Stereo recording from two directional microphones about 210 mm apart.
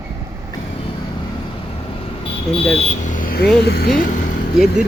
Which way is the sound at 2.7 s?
35° left (ahead or behind).